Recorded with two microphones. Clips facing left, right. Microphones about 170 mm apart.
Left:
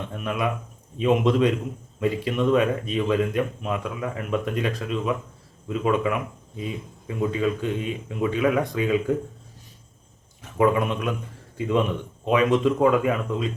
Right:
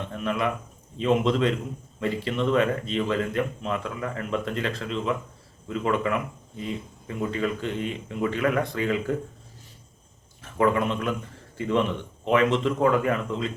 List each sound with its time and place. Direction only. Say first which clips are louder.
0.3 s speech: even; 10° left (ahead or behind)
7.2 s speech: left 3 dB; 10° left (ahead or behind)
10.4 s a man's voice: left 2 dB; 15° left (ahead or behind)